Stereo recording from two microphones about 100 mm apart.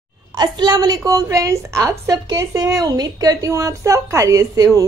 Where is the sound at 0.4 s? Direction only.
45° right (ahead or behind).